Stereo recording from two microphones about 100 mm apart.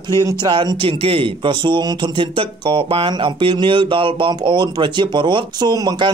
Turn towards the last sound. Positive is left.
turn(degrees=-40)  # may be behind; listen again after turning